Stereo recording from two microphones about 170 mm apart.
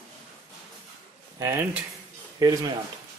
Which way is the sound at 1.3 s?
15° right (ahead or behind).